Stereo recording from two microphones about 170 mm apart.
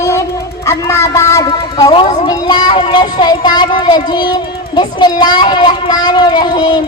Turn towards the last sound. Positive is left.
turn(degrees=25)  # may be behind; listen again after turning